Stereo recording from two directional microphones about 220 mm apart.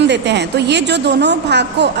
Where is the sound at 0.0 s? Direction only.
50° right (ahead or behind).